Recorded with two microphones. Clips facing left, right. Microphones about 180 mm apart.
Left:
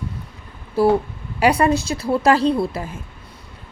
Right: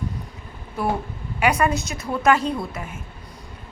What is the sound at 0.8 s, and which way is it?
A woman's voice, 30° left (ahead or behind).